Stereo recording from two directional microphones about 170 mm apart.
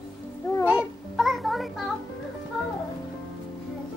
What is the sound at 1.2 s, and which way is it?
Music, centre (ahead or behind).